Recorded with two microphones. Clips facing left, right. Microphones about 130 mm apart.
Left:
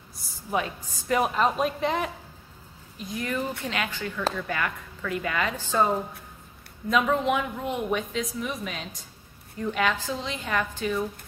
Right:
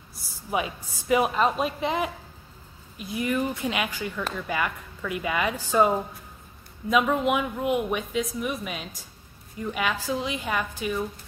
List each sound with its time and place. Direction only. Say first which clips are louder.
0.1 s a woman's voice: even; 5° right (ahead or behind)
6.9 s a woman's voice: right 1 dB; 5° right (ahead or behind)